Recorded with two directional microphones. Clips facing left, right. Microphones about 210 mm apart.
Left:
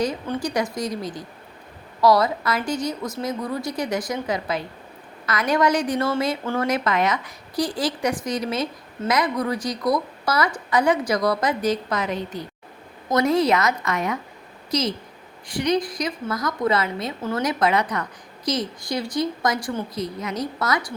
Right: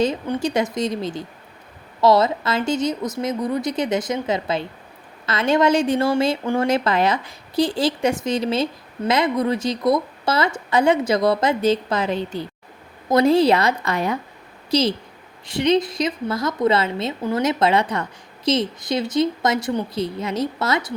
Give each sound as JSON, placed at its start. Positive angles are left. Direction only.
{"t": 0.3, "sound": "a woman's voice", "side_deg": -25}